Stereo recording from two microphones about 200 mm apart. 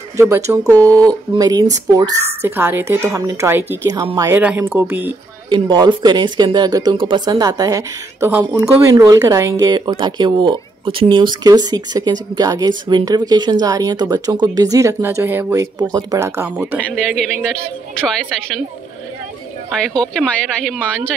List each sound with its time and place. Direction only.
0.2 s speech: 15° right (ahead or behind)
5.5 s speech: 20° right (ahead or behind); by 18.1 s centre (ahead or behind)
19.8 s speech: 5° left (ahead or behind)